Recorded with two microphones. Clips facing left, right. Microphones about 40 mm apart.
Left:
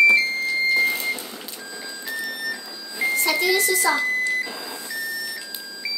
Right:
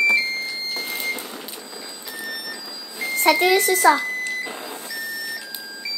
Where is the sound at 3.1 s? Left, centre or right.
Right.